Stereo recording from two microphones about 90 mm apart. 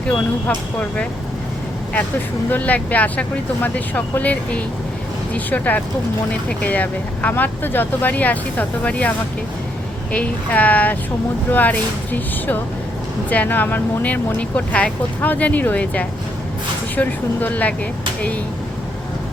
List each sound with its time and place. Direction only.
0.4 s speech: 15° left (ahead or behind)
2.5 s speech: 15° left (ahead or behind)